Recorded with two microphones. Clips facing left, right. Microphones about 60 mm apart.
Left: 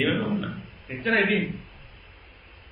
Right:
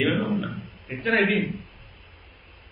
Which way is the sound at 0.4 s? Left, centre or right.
Right.